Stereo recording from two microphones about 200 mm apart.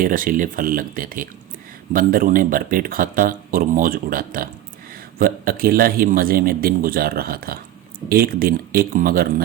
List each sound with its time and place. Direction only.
0.0 s speech: 45° right (ahead or behind)